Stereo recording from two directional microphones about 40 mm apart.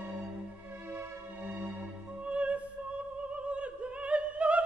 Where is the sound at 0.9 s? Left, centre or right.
Right.